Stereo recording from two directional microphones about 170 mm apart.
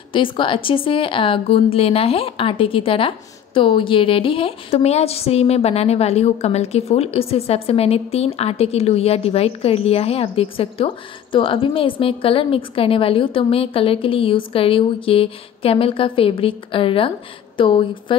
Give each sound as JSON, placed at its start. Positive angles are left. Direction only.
{"t": 0.1, "sound": "a woman's voice", "side_deg": 30}